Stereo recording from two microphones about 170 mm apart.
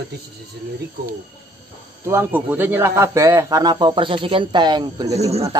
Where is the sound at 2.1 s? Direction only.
15° right (ahead or behind).